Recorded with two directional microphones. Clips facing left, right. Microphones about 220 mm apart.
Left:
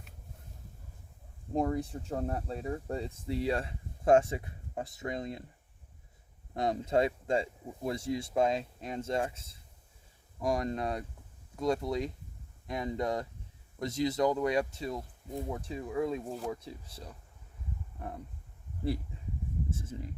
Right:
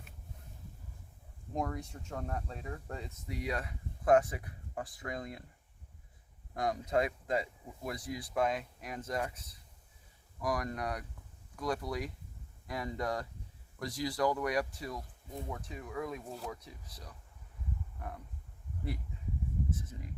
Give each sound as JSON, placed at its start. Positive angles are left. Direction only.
{"t": 1.5, "sound": "speech", "side_deg": 30}
{"t": 6.5, "sound": "speech", "side_deg": 25}
{"t": 19.1, "sound": "a sound", "side_deg": 30}
{"t": 19.8, "sound": "speech", "side_deg": 30}